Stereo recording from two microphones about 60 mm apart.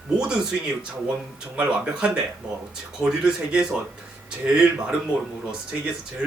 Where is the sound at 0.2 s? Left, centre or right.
Centre.